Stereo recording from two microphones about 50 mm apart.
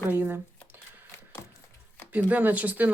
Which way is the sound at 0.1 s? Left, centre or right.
Right.